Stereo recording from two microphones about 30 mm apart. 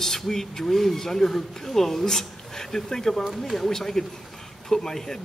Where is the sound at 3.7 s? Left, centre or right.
Centre.